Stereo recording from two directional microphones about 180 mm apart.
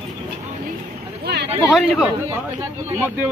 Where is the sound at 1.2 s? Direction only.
65° right (ahead or behind).